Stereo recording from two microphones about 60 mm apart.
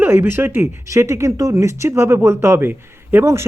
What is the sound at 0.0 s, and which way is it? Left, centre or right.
Speech, right.